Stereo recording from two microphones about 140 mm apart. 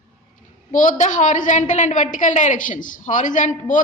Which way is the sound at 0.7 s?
65° left (ahead or behind).